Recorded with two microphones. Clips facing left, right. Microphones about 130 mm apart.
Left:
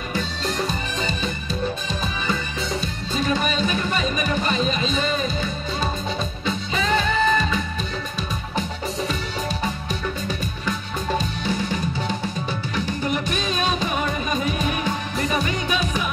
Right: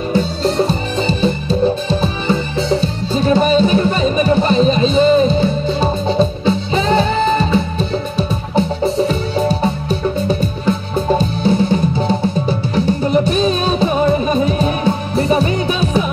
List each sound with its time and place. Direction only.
0.1 s music: 30° right (ahead or behind)